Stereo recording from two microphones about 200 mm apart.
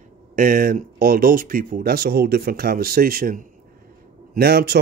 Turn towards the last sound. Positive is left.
turn(degrees=-50)  # may be behind; listen again after turning